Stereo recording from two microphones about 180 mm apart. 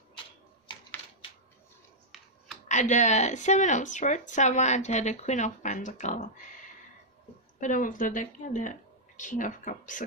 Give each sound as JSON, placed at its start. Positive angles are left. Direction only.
{"t": 2.1, "sound": "computer keyboard", "side_deg": 0}
{"t": 2.7, "sound": "speech", "side_deg": 40}
{"t": 7.6, "sound": "a woman's voice", "side_deg": 45}